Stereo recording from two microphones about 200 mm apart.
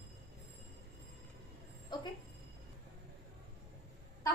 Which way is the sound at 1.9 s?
20° left (ahead or behind).